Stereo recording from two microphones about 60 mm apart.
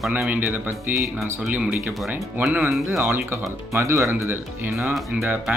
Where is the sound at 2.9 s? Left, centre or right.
Right.